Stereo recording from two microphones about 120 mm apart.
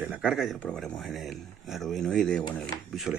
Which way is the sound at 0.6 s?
5° left (ahead or behind).